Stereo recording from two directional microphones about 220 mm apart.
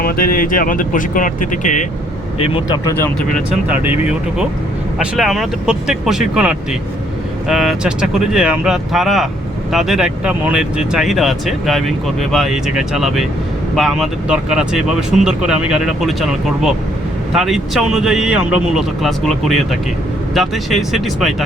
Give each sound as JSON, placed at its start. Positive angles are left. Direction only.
{"t": 0.0, "sound": "speech", "side_deg": 40}
{"t": 2.4, "sound": "speech", "side_deg": 25}
{"t": 3.3, "sound": "speech", "side_deg": -5}